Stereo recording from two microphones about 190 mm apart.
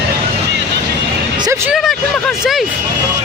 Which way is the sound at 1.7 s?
Centre (ahead or behind).